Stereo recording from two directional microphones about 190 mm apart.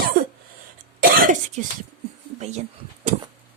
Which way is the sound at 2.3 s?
35° right (ahead or behind).